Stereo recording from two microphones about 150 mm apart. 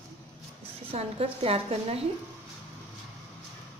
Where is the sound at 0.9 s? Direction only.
40° right (ahead or behind).